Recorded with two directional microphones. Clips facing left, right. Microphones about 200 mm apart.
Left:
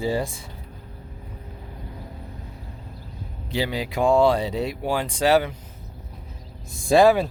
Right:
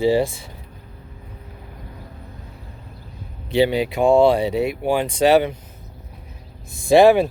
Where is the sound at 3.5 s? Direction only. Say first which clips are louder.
Right 7 dB; 25° right (ahead or behind).